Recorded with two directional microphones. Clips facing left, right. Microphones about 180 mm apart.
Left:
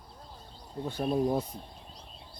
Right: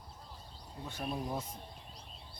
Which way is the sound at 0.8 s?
35° left (ahead or behind).